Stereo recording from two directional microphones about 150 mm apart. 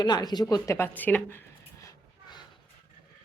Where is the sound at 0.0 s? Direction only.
25° left (ahead or behind).